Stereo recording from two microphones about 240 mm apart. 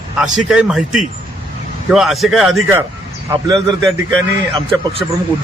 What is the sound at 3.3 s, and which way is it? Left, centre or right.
Speech, centre.